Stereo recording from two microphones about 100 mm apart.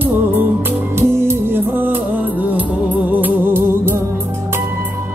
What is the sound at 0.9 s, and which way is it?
Music, 25° right (ahead or behind).